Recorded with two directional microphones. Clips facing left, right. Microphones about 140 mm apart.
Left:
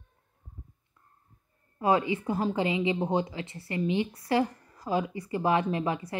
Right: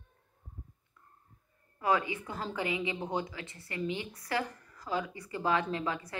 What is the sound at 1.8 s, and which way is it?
A woman's voice, 25° left (ahead or behind).